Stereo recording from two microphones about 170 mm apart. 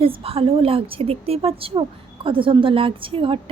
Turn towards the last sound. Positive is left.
turn(degrees=-30)  # may be behind; listen again after turning